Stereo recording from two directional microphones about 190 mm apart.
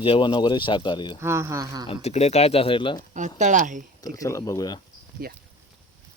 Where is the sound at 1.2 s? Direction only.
15° right (ahead or behind).